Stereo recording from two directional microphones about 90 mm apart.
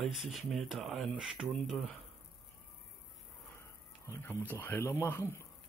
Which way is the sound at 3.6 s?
30° left (ahead or behind).